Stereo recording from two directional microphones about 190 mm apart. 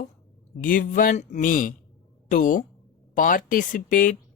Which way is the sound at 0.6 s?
45° left (ahead or behind).